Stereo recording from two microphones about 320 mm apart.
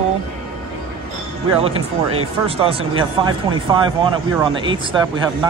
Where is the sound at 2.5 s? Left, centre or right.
Centre.